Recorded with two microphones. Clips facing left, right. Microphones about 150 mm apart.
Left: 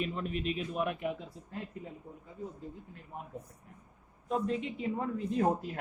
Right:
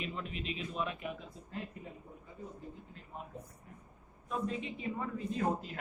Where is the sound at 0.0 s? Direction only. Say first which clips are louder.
Left 6 dB; 45° left (ahead or behind).